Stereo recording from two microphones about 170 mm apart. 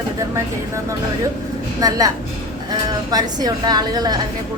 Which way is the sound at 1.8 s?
20° right (ahead or behind).